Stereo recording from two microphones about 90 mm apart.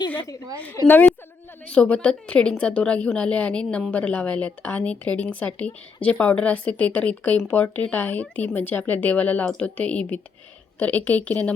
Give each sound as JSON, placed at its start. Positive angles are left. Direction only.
{"t": 0.9, "sound": "a woman's voice", "side_deg": 20}